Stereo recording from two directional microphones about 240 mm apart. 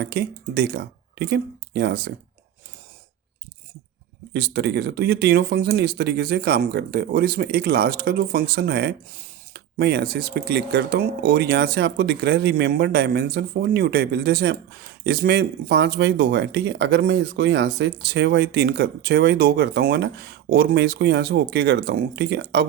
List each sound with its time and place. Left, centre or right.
0.0 s speech: right
4.3 s speech: right